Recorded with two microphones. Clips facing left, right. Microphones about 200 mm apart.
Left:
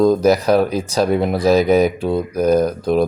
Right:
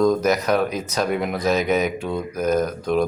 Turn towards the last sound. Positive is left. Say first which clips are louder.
# left 5 dB
turn(degrees=35)  # may be behind; listen again after turning